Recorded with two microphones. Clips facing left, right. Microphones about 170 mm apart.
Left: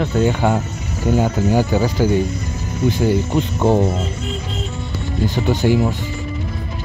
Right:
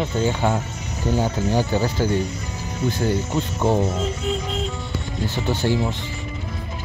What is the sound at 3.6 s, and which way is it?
Speech, 55° left (ahead or behind).